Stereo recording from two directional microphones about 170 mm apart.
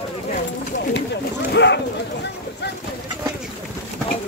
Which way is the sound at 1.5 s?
90° left.